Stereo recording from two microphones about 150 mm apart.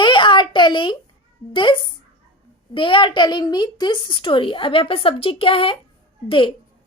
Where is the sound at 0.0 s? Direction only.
35° left (ahead or behind).